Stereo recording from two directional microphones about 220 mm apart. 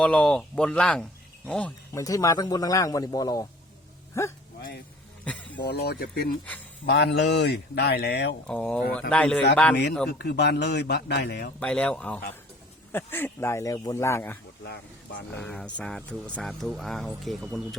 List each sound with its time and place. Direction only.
0.0 s a man's voice: 5° left (ahead or behind)
5.8 s speech: 45° left (ahead or behind)
8.4 s speech: 5° left (ahead or behind)
10.1 s speech: 50° left (ahead or behind)
11.6 s a man's voice: 5° left (ahead or behind)
14.6 s speech: 50° left (ahead or behind)
15.4 s speech: 5° left (ahead or behind)